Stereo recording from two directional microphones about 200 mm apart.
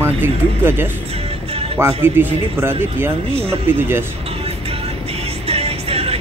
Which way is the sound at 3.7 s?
10° right (ahead or behind).